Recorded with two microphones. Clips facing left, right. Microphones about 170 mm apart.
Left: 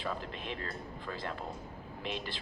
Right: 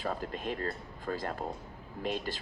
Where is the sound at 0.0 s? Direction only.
45° right (ahead or behind).